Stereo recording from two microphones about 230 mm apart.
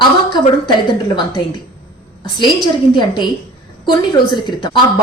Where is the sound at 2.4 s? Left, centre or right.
Left.